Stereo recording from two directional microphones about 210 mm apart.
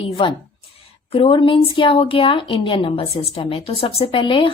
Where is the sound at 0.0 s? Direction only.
25° left (ahead or behind).